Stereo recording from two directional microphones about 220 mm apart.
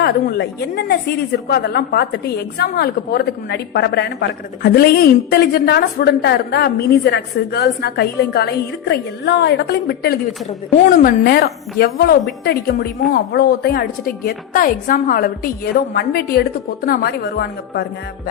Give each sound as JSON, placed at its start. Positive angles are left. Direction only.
{"t": 0.0, "sound": "a woman's voice", "side_deg": 50}